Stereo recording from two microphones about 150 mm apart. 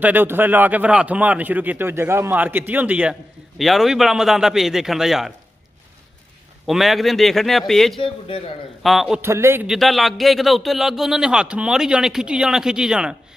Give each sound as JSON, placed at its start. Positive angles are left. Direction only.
{"t": 0.0, "sound": "a man's voice", "side_deg": -10}
{"t": 6.6, "sound": "a man's voice", "side_deg": 0}
{"t": 9.2, "sound": "a man's voice", "side_deg": -15}
{"t": 9.7, "sound": "a man's voice", "side_deg": 0}